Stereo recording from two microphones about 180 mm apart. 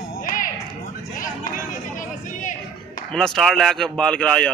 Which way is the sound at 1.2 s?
45° left (ahead or behind).